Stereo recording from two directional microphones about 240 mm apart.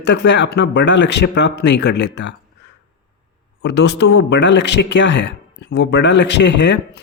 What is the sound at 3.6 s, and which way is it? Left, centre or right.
Speech, left.